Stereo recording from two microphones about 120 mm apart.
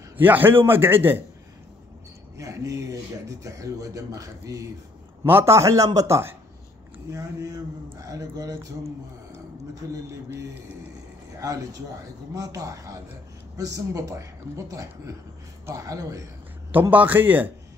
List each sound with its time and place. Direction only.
0.2 s a man's voice: 15° right (ahead or behind)
2.3 s speech: 25° right (ahead or behind)
11.3 s speech: 30° right (ahead or behind)
16.9 s a man's voice: 15° right (ahead or behind)